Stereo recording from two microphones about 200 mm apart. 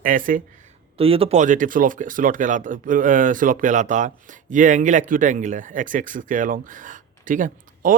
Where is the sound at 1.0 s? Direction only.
30° right (ahead or behind).